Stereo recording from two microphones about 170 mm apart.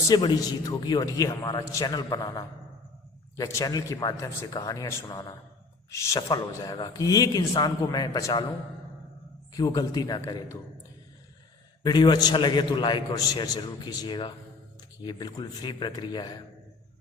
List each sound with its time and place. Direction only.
0.1 s a man's voice: 25° left (ahead or behind)
9.5 s a man's voice: 20° left (ahead or behind)
11.8 s a man's voice: 25° left (ahead or behind)